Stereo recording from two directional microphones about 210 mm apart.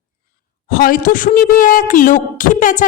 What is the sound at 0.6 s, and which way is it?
Speech, 45° left (ahead or behind).